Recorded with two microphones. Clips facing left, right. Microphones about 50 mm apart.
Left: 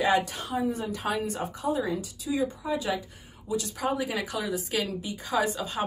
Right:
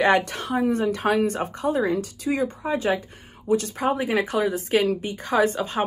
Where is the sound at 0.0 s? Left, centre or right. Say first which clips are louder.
Right 5 dB; right.